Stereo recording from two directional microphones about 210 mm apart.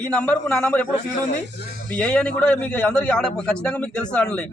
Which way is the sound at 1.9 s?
5° left (ahead or behind).